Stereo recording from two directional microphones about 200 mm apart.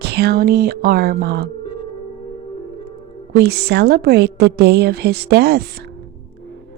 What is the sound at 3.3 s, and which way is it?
Speech, 50° right (ahead or behind).